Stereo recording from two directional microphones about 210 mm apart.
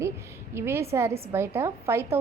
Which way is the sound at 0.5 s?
10° right (ahead or behind).